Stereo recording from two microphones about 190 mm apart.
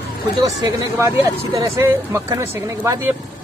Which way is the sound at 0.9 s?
15° right (ahead or behind).